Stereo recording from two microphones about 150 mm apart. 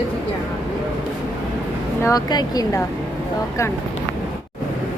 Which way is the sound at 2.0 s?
25° left (ahead or behind).